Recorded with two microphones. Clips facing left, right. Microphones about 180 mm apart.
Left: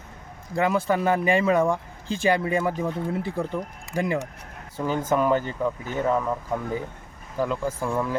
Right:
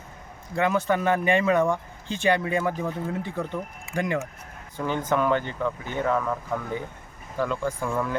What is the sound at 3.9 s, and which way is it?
Speech, 35° left (ahead or behind).